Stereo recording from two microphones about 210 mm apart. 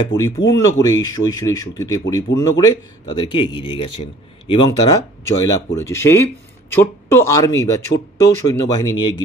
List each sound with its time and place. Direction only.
0.1 s a man's voice: 20° left (ahead or behind)